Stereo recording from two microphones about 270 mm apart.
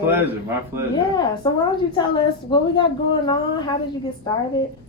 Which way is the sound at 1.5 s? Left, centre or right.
Centre.